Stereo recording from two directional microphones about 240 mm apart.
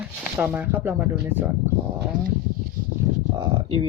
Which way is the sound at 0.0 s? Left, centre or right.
Centre.